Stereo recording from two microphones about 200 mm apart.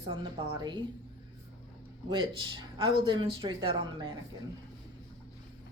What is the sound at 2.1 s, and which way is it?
Speech, 25° right (ahead or behind).